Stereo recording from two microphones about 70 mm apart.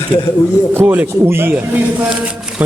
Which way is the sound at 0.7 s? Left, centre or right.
Right.